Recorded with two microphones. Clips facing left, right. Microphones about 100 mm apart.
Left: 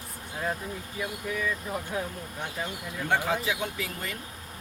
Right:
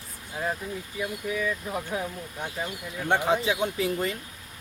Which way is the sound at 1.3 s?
Centre (ahead or behind).